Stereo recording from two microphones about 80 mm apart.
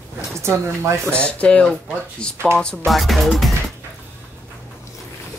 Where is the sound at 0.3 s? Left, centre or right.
Right.